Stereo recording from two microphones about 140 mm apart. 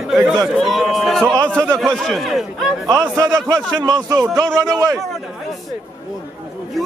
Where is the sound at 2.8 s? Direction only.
20° right (ahead or behind).